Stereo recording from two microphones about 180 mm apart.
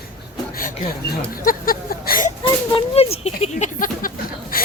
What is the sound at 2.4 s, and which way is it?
Speech, 30° left (ahead or behind).